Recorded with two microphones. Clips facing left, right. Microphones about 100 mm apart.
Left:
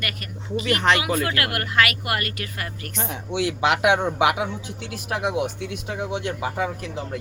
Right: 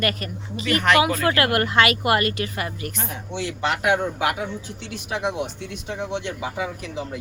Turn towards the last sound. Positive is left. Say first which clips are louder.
# even
turn(degrees=0)  # may be behind; listen again after turning